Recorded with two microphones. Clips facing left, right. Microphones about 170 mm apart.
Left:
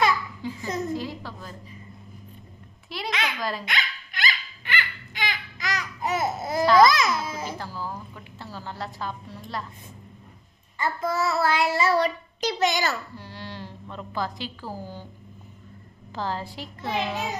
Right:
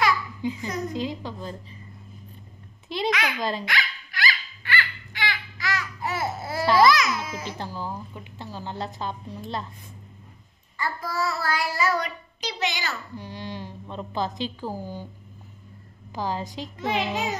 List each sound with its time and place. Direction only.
0.4 s a child's voice: 20° right (ahead or behind)
2.9 s a woman's voice: 20° right (ahead or behind)
3.6 s dog: 20° left (ahead or behind)
6.8 s a child's voice: 25° left (ahead or behind)
7.5 s a woman's voice: 20° right (ahead or behind)
10.8 s child singing: 25° left (ahead or behind)
12.4 s a child's voice: 45° left (ahead or behind)
13.1 s a woman's voice: 15° right (ahead or behind)
16.2 s a child's voice: 15° right (ahead or behind)